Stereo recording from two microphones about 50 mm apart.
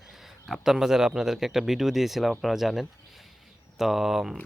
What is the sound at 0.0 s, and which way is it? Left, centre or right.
Speech, centre.